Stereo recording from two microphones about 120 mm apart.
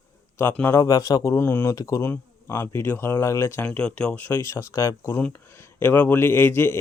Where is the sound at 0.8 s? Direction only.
30° left (ahead or behind).